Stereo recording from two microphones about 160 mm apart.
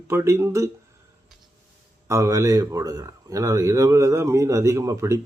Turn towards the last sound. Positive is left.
turn(degrees=-15)  # may be behind; listen again after turning